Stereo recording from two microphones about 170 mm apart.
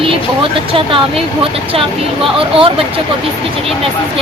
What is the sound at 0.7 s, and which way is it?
A woman's voice, 35° right (ahead or behind).